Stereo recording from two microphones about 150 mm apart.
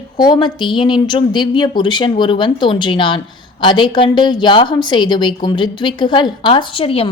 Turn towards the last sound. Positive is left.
turn(degrees=35)  # may be behind; listen again after turning